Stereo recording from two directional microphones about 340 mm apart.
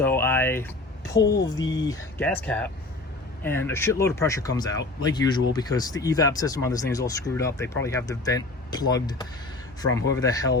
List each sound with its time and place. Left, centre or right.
0.0 s a sound: centre
1.2 s speech: left
1.5 s speech: centre